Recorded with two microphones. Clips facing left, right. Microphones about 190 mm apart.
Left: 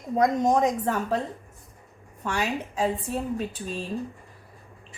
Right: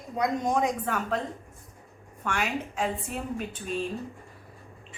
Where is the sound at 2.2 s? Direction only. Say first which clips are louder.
Left 2 dB; 35° left (ahead or behind).